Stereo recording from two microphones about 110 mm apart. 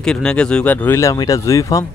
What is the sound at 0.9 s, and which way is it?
Speech, 25° left (ahead or behind).